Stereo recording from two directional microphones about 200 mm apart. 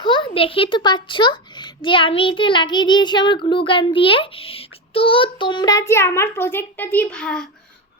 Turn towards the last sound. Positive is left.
turn(degrees=5)  # may be behind; listen again after turning